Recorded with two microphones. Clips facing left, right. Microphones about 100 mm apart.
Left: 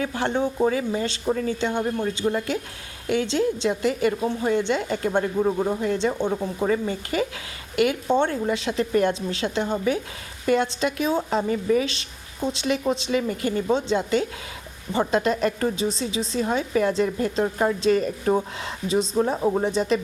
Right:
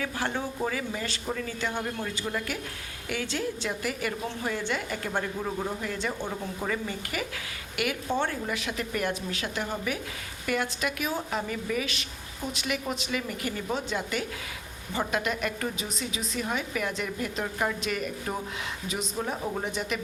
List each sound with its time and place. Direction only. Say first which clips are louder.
0.0 s a woman's voice: left 7 dB; 25° left (ahead or behind)